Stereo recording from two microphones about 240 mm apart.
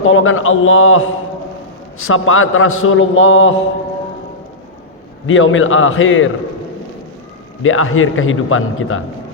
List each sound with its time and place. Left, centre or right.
0.1 s a man's voice: left
5.2 s a man's voice: left
7.6 s a man's voice: left